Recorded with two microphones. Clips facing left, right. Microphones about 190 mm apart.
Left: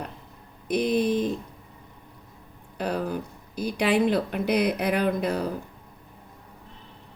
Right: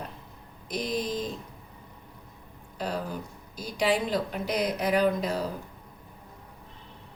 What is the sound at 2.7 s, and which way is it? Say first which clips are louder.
Speech: left 5 dB; 60° left (ahead or behind).